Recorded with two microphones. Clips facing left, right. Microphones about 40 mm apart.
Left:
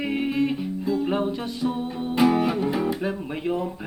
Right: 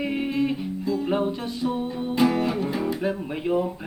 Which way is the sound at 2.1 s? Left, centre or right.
Centre.